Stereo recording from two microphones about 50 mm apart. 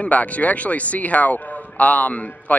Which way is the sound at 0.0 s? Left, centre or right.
Left.